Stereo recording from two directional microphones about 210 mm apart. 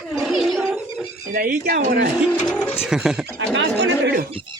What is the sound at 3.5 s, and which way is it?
Speech, 55° right (ahead or behind).